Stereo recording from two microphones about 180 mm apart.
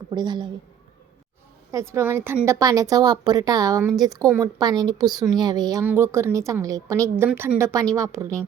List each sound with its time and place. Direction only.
0.1 s a woman's voice: 25° right (ahead or behind)
1.7 s a woman's voice: 15° right (ahead or behind)